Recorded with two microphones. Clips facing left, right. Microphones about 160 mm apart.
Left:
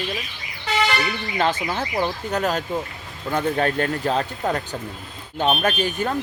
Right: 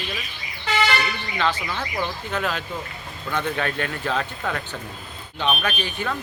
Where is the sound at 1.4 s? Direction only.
40° left (ahead or behind).